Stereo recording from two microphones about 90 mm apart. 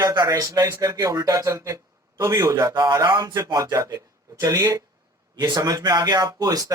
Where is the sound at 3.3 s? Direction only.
40° right (ahead or behind).